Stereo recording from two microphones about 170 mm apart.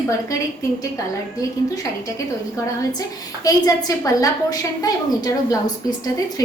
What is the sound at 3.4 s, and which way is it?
A woman's voice, 20° left (ahead or behind).